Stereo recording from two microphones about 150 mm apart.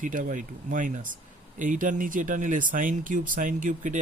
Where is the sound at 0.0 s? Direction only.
60° right (ahead or behind).